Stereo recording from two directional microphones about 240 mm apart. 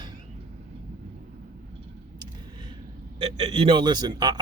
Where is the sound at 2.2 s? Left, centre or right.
Centre.